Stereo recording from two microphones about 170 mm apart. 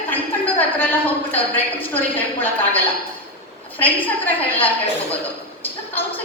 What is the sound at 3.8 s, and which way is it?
Speech, 10° left (ahead or behind).